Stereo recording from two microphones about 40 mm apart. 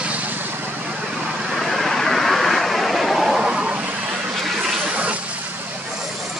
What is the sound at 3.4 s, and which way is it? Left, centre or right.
Vehicle, centre.